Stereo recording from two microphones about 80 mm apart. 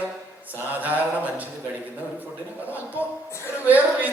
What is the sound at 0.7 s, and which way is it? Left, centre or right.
Mantra, right.